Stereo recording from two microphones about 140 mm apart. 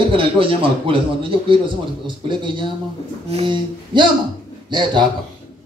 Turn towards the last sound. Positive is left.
turn(degrees=-35)  # may be behind; listen again after turning